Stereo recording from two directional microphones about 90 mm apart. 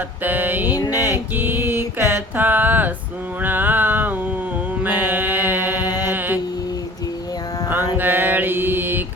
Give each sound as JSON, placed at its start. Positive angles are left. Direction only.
{"t": 0.2, "sound": "mantra", "side_deg": -20}
{"t": 0.9, "sound": "a sound", "side_deg": -25}
{"t": 4.8, "sound": "music", "side_deg": -20}
{"t": 7.9, "sound": "mantra", "side_deg": -20}